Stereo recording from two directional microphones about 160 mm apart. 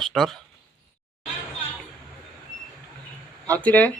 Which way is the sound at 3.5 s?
10° left (ahead or behind).